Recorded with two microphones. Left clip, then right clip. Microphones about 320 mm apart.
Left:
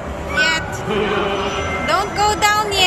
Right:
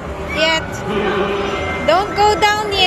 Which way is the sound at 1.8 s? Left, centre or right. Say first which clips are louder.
Right 4 dB; centre.